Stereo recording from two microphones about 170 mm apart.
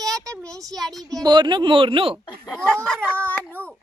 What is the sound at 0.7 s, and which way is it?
Speech, centre (ahead or behind).